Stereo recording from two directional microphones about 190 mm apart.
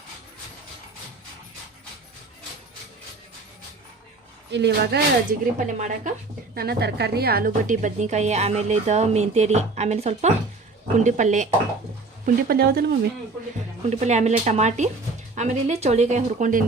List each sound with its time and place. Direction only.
4.5 s speech: 65° right (ahead or behind)
5.5 s a woman's voice: 40° right (ahead or behind)
12.2 s speech: 55° right (ahead or behind)
13.9 s a woman's voice: 40° right (ahead or behind)